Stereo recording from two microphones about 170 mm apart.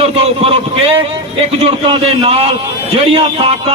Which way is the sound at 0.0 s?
35° right (ahead or behind).